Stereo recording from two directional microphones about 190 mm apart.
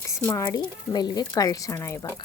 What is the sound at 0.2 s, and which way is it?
Speech, 15° left (ahead or behind).